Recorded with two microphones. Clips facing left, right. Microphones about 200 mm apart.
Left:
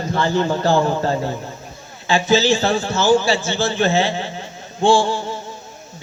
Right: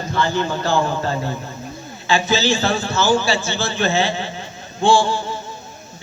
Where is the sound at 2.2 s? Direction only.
50° left (ahead or behind).